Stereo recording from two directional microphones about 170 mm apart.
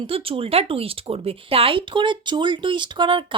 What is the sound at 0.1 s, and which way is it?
Speech, 35° right (ahead or behind).